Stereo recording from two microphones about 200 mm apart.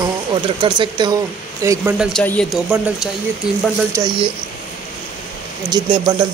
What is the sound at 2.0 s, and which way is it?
Speech, 5° left (ahead or behind).